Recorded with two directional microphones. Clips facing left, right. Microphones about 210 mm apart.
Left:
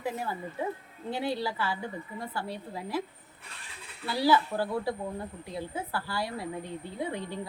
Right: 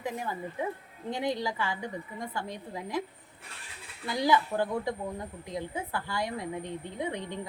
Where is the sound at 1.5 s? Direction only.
10° left (ahead or behind).